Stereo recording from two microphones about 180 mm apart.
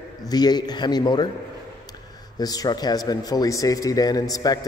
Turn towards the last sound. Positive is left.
turn(degrees=20)  # may be behind; listen again after turning